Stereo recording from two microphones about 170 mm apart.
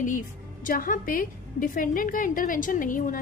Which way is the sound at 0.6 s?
55° left (ahead or behind).